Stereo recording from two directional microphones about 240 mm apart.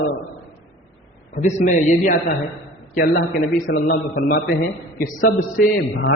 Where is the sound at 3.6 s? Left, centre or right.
Left.